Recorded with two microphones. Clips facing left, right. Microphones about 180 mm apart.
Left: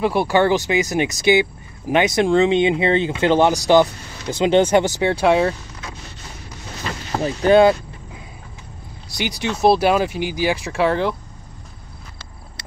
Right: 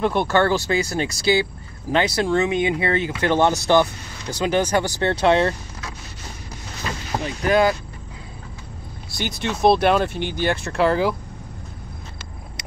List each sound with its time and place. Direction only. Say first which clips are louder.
0.0 s speech: left 2 dB; 10° left (ahead or behind)
5.2 s speech: left 1 dB; 5° left (ahead or behind)
7.2 s speech: left 6 dB; 30° left (ahead or behind)
9.1 s speech: left 2 dB; 10° left (ahead or behind)